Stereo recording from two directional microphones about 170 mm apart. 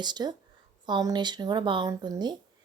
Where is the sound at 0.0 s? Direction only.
25° right (ahead or behind).